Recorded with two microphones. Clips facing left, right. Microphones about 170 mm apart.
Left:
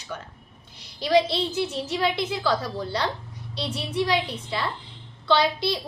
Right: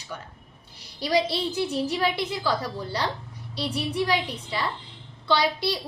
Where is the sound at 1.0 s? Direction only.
10° right (ahead or behind).